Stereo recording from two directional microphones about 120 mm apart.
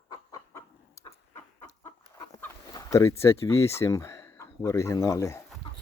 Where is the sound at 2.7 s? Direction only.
30° left (ahead or behind).